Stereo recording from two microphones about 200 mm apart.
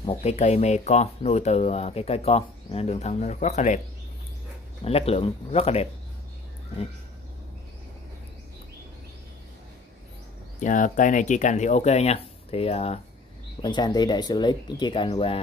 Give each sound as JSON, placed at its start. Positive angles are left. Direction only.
{"t": 0.0, "sound": "speech", "side_deg": 30}
{"t": 4.8, "sound": "speech", "side_deg": 30}
{"t": 10.6, "sound": "speech", "side_deg": 40}